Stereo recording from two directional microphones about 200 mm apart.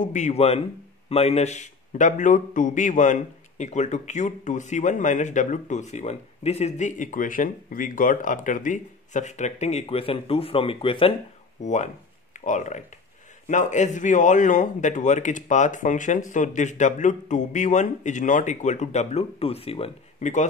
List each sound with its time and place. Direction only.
0.0 s a man's voice: 35° left (ahead or behind)